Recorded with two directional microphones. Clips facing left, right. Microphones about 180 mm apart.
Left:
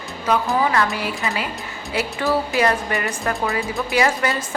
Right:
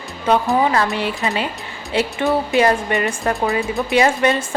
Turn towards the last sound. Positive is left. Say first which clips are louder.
# right 5 dB
turn(degrees=-25)  # may be behind; listen again after turning